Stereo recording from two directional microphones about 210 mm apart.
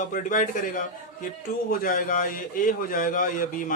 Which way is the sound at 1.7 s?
40° left (ahead or behind).